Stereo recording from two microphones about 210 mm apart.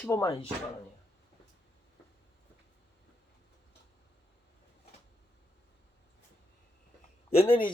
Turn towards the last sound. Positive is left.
turn(degrees=25)  # may be behind; listen again after turning